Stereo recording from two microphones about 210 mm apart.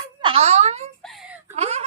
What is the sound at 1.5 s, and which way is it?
Wail, 30° right (ahead or behind).